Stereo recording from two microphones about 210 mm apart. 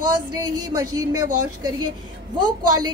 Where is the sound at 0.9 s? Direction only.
15° right (ahead or behind).